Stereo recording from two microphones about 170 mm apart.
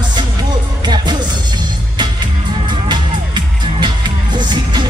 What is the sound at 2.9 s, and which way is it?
Music, 25° right (ahead or behind).